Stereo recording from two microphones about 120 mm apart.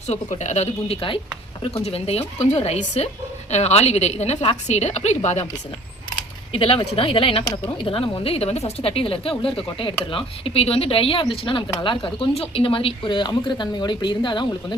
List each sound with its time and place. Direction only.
0.1 s a woman's voice: 75° left (ahead or behind)
6.5 s speech: 45° left (ahead or behind)